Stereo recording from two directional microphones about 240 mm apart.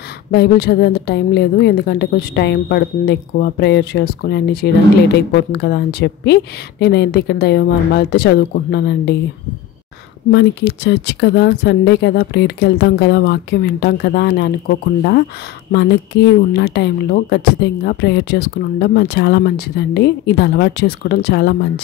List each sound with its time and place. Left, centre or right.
0.3 s speech: left
10.3 s speech: left
16.5 s speech: left